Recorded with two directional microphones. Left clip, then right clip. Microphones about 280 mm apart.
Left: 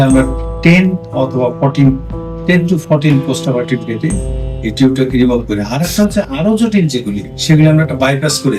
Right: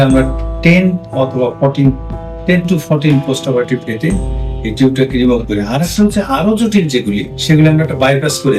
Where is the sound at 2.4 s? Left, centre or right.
Centre.